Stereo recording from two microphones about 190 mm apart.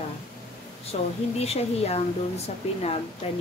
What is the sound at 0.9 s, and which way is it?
Speech, 35° left (ahead or behind).